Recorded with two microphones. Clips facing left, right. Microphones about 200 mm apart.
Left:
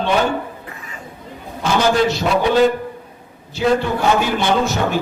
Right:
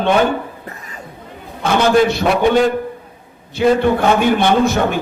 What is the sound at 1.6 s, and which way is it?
Speech, 55° right (ahead or behind).